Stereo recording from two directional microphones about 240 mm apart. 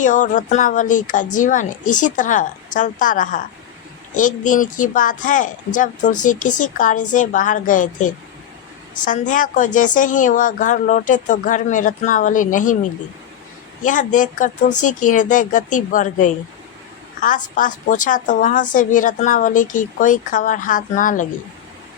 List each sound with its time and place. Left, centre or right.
0.0 s a woman's voice: left
13.8 s a woman's voice: left